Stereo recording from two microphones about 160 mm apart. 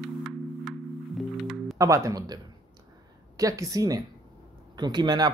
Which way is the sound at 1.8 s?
20° right (ahead or behind).